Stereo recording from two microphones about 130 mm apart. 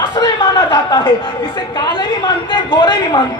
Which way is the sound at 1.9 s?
40° left (ahead or behind).